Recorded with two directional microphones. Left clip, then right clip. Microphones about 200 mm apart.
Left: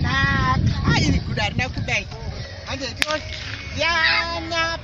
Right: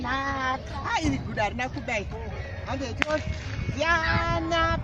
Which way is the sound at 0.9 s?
15° left (ahead or behind).